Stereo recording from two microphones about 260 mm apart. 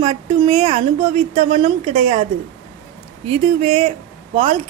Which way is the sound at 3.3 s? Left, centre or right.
Right.